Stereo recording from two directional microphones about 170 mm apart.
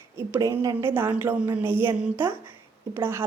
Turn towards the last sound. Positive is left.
turn(degrees=-15)  # may be behind; listen again after turning